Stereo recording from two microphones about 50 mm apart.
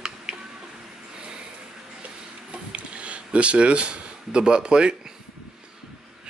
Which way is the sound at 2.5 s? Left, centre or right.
Right.